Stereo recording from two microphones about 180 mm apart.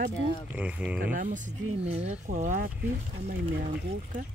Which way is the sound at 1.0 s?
50° right (ahead or behind).